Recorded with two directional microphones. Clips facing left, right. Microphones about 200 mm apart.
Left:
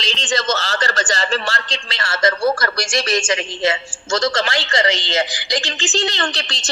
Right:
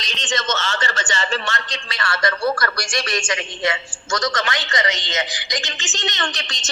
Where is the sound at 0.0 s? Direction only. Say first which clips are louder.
Left 4 dB; 30° left (ahead or behind).